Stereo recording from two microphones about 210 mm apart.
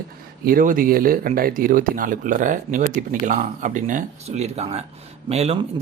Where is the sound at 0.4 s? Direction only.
40° right (ahead or behind).